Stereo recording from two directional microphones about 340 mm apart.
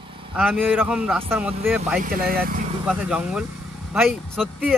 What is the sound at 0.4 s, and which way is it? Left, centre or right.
Speech, centre.